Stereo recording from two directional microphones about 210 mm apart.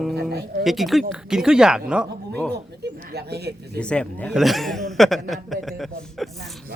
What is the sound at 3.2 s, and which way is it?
Speech, 50° right (ahead or behind).